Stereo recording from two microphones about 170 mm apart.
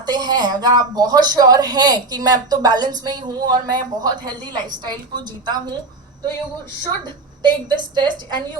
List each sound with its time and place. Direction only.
0.0 s speech: 25° right (ahead or behind)
7.0 s speech: 25° right (ahead or behind)